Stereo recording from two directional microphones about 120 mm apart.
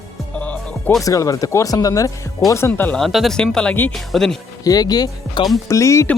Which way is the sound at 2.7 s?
15° left (ahead or behind).